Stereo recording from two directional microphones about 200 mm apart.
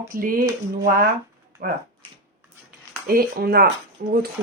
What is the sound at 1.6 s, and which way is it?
Speech, 50° right (ahead or behind).